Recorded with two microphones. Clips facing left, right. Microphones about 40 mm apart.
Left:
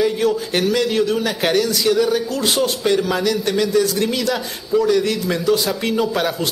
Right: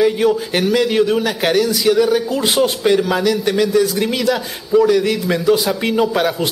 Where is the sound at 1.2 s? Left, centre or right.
Centre.